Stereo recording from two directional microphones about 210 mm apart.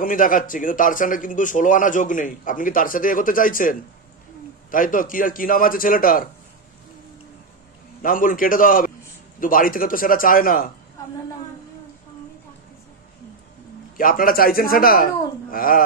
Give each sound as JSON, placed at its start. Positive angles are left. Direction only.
{"t": 0.0, "sound": "a man's voice", "side_deg": 40}
{"t": 8.0, "sound": "a man's voice", "side_deg": 40}
{"t": 13.9, "sound": "a man's voice", "side_deg": 40}